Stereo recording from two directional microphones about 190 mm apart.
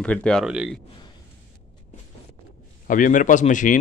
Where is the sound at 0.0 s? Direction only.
5° left (ahead or behind).